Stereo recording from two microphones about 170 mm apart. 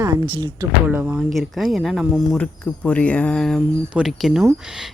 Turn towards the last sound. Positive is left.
turn(degrees=-5)  # may be behind; listen again after turning